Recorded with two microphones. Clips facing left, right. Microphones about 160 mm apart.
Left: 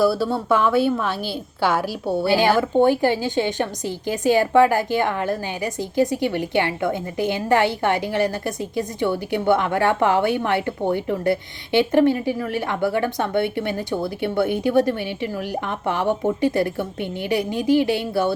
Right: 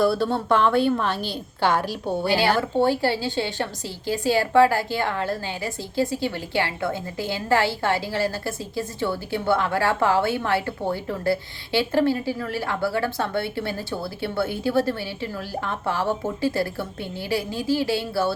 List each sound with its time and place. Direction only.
0.0 s a woman's voice: 5° left (ahead or behind)